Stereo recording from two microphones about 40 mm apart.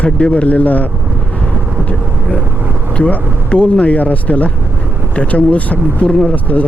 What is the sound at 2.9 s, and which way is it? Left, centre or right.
Speech, left.